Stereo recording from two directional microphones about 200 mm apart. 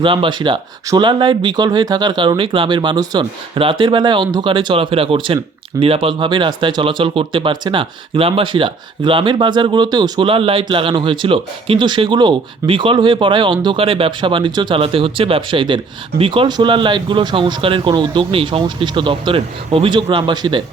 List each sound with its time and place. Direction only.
0.0 s speech: 25° right (ahead or behind)